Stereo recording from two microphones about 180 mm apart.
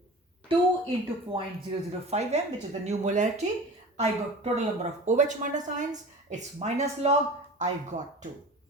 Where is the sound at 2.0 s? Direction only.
40° right (ahead or behind).